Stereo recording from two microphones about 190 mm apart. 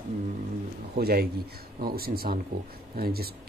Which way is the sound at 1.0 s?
55° right (ahead or behind).